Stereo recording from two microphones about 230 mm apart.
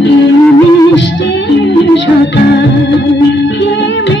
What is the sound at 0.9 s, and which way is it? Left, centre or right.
Music, left.